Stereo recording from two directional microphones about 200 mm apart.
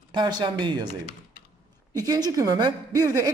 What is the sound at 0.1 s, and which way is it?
Speech, 20° right (ahead or behind).